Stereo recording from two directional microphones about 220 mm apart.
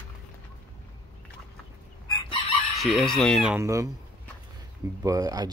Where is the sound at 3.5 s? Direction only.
15° right (ahead or behind).